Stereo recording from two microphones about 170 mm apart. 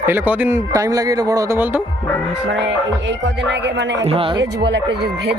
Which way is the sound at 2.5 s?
90° right.